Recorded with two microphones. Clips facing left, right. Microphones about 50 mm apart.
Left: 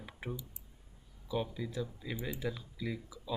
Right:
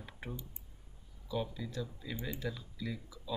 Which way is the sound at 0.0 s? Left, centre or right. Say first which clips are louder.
Left 3 dB; centre.